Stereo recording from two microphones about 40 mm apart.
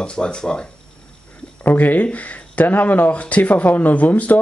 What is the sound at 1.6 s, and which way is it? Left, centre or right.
Speech, left.